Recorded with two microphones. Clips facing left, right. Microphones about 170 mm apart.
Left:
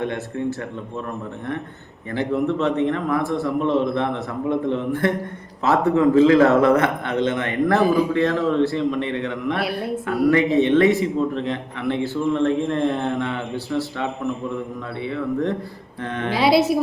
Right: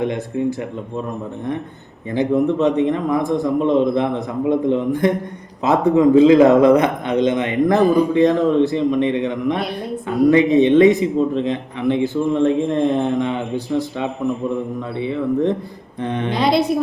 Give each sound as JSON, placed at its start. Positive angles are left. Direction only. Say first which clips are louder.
{"t": 0.0, "sound": "a man's voice", "louder": "right 4 dB", "side_deg": -15}
{"t": 2.0, "sound": "a man's voice", "louder": "right 5 dB", "side_deg": -15}
{"t": 9.6, "sound": "a sound", "louder": "left 1 dB", "side_deg": 5}
{"t": 10.1, "sound": "a man's voice", "louder": "right 5 dB", "side_deg": -20}
{"t": 16.3, "sound": "speech", "louder": "left 1 dB", "side_deg": 5}